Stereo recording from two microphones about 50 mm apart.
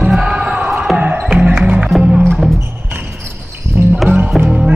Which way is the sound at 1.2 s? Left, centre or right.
Centre.